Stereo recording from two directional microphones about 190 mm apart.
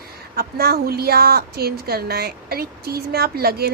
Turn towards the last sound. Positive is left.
turn(degrees=-55)  # may be behind; listen again after turning